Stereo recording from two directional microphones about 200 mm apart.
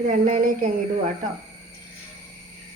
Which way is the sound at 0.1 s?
40° right (ahead or behind).